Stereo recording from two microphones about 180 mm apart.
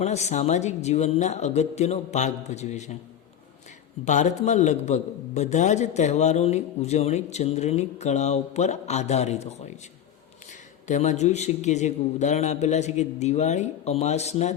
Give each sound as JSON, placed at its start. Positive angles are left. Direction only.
{"t": 0.0, "sound": "a man's voice", "side_deg": 40}
{"t": 4.0, "sound": "a man's voice", "side_deg": 40}
{"t": 10.8, "sound": "a man's voice", "side_deg": 40}